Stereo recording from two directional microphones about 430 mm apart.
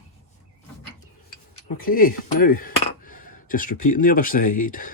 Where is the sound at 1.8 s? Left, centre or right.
Centre.